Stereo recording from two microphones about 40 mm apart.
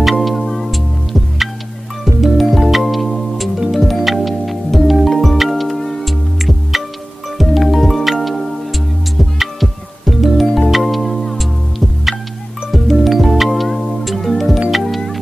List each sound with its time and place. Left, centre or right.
0.0 s music: centre
2.2 s music: centre
12.7 s music: centre